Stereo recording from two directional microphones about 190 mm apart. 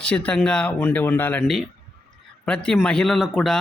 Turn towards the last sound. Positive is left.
turn(degrees=0)  # may be behind; listen again after turning